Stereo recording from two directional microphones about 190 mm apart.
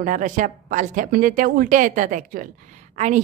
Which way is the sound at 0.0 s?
45° right (ahead or behind).